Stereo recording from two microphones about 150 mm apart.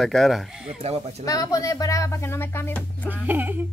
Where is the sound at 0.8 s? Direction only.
45° right (ahead or behind).